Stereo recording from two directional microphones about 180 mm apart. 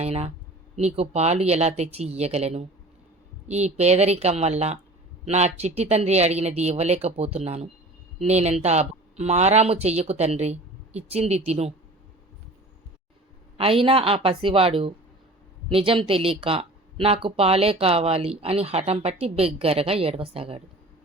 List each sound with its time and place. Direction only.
0.0 s speech: 35° right (ahead or behind)
13.6 s speech: 30° right (ahead or behind)